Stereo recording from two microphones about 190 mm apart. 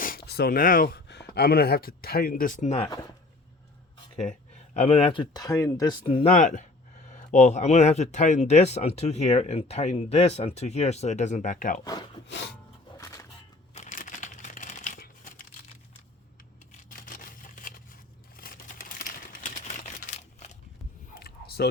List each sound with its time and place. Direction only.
0.0 s speech: 55° left (ahead or behind); by 2.9 s 35° left (ahead or behind)
4.7 s speech: 35° left (ahead or behind)
11.9 s wood: 20° left (ahead or behind)
12.3 s filing: 65° left (ahead or behind)
13.0 s a sound: 20° left (ahead or behind)
13.7 s crumpling: 40° left (ahead or behind)
16.9 s a sound: 45° left (ahead or behind)
18.3 s typewriter: 50° left (ahead or behind)
21.2 s a sound: 55° left (ahead or behind)